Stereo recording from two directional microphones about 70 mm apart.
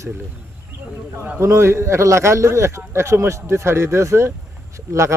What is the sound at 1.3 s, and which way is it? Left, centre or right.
Speech, right.